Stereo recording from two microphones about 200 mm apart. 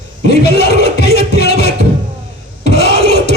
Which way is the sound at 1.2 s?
55° left (ahead or behind).